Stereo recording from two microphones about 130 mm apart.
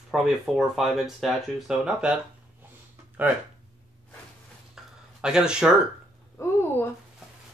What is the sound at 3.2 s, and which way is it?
Speech, 10° right (ahead or behind).